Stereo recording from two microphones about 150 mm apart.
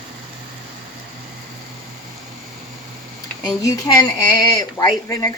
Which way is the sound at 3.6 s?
20° left (ahead or behind).